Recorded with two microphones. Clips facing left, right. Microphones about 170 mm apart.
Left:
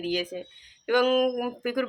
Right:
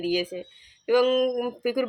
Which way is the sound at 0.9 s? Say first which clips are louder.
Right 2 dB; centre (ahead or behind).